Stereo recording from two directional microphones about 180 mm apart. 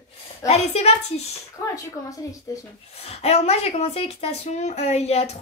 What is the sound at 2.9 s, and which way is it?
A woman's voice, 35° left (ahead or behind).